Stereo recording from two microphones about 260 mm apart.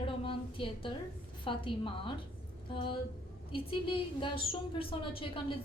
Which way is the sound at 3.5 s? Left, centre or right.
Centre.